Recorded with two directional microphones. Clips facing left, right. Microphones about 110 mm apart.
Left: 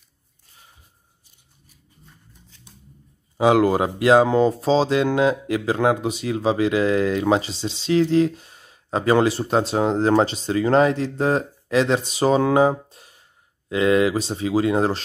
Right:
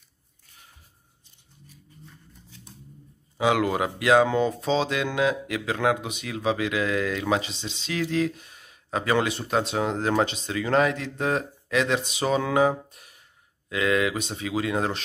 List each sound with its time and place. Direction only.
3.3 s speech: 35° left (ahead or behind)